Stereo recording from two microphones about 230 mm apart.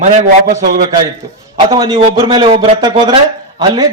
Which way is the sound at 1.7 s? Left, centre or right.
Centre.